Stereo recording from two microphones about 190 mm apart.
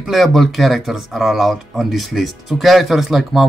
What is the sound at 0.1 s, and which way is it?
Speech, centre (ahead or behind).